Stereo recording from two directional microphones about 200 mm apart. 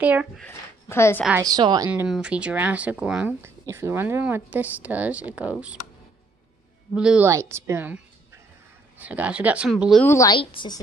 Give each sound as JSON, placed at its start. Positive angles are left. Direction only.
{"t": 0.0, "sound": "speech", "side_deg": -5}
{"t": 0.4, "sound": "a woman's voice", "side_deg": 10}
{"t": 1.4, "sound": "speech", "side_deg": -20}
{"t": 1.9, "sound": "speech", "side_deg": -5}
{"t": 7.0, "sound": "speech", "side_deg": -5}
{"t": 9.0, "sound": "speech", "side_deg": -5}
{"t": 10.0, "sound": "a woman's voice", "side_deg": 15}